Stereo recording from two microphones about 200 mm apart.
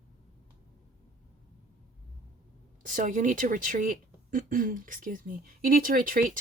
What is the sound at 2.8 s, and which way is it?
Speech, 40° right (ahead or behind).